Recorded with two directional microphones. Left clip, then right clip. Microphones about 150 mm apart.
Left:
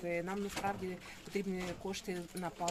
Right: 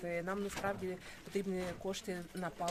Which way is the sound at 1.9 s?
15° right (ahead or behind).